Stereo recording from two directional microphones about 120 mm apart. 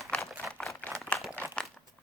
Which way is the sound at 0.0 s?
Centre (ahead or behind).